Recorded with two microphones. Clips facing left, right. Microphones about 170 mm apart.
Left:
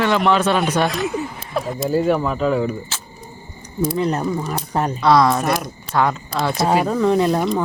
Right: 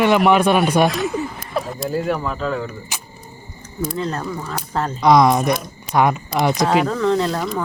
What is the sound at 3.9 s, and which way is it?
Speech, 15° left (ahead or behind).